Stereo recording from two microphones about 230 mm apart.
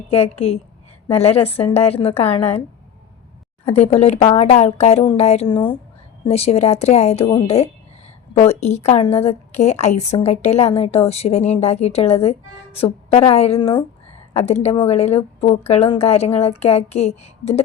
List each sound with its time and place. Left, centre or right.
0.1 s a woman's voice: left
3.8 s a woman's voice: left